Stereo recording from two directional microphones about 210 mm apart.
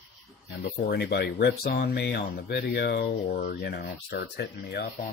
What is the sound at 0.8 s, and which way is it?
Speech, 50° left (ahead or behind).